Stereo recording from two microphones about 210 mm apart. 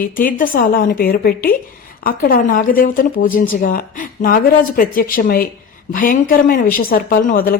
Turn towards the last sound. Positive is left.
turn(degrees=45)  # may be behind; listen again after turning